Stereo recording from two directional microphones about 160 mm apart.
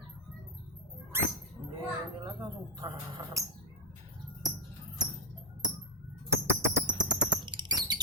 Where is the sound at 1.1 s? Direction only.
15° right (ahead or behind).